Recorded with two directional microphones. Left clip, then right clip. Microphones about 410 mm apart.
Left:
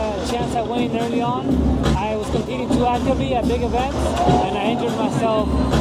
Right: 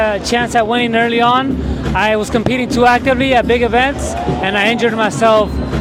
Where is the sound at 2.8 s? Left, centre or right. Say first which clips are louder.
Right 11 dB; right.